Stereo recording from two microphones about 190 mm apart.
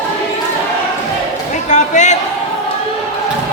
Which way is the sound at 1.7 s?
40° left (ahead or behind).